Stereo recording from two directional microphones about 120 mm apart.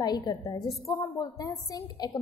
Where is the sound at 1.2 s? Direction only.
30° left (ahead or behind).